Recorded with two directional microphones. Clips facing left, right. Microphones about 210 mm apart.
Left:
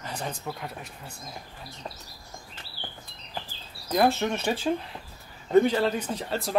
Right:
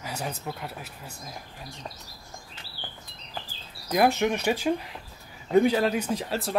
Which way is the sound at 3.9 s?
10° right (ahead or behind).